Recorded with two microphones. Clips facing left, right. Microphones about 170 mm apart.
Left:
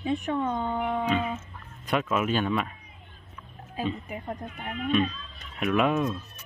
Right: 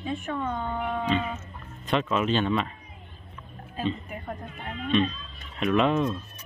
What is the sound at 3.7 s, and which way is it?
Speech, 10° left (ahead or behind).